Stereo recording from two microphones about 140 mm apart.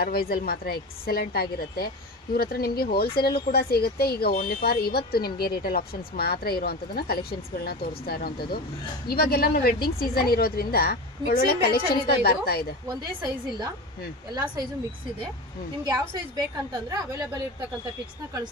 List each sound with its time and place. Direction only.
0.0 s speech: 90° left
13.0 s speech: 25° right (ahead or behind)
16.7 s speech: 25° right (ahead or behind)